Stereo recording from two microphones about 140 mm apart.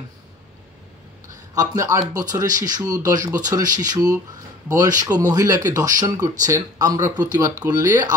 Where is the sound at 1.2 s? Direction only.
25° right (ahead or behind).